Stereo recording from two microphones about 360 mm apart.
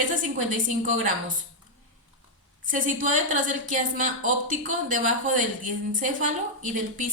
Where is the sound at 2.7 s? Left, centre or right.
Right.